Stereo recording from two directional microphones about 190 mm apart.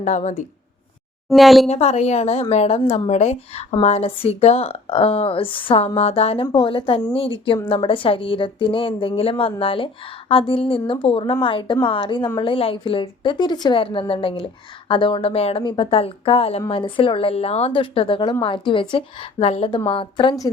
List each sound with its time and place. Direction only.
0.0 s a woman's voice: 40° left (ahead or behind)
1.3 s a woman's voice: centre (ahead or behind)
1.6 s a woman's voice: 35° left (ahead or behind)